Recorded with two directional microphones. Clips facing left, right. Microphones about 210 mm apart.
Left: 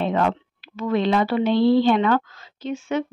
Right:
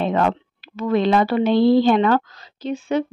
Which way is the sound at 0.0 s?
45° right (ahead or behind).